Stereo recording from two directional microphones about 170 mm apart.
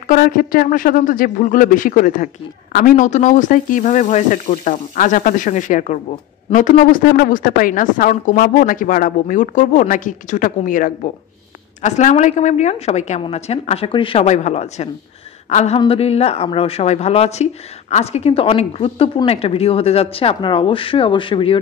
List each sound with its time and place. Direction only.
0.1 s a woman's voice: 60° left (ahead or behind); by 21.5 s 30° left (ahead or behind)